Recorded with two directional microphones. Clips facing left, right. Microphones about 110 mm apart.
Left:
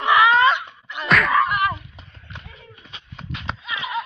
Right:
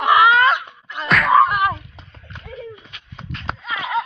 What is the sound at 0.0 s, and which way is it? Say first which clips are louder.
Wail: right 2 dB; 5° right (ahead or behind).